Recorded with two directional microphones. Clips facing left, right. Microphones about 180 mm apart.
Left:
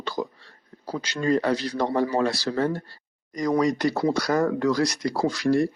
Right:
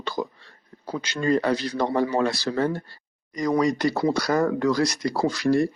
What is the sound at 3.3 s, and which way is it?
Speech, 45° left (ahead or behind).